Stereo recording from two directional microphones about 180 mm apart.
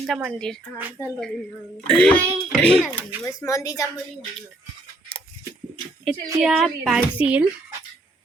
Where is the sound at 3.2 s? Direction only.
15° left (ahead or behind).